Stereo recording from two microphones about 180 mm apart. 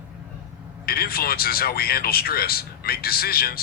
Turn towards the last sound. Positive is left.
turn(degrees=55)  # may be behind; listen again after turning